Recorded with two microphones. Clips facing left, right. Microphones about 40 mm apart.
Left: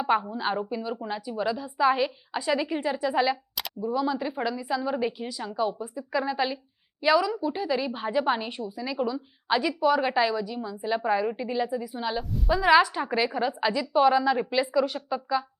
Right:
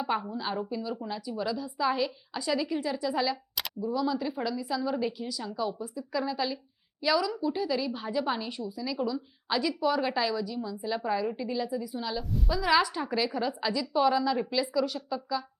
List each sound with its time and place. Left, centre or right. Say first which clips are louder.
0.0 s a woman's voice: left 5 dB; left
12.2 s a woman's voice: even; centre
12.5 s a woman's voice: left 6 dB; left